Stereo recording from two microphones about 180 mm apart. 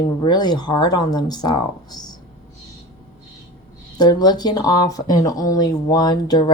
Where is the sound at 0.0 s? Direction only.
25° left (ahead or behind).